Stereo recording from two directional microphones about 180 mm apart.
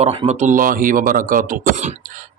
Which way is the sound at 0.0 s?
35° right (ahead or behind).